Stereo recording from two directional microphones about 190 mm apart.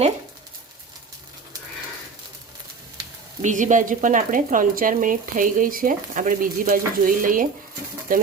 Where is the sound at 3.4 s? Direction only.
40° right (ahead or behind).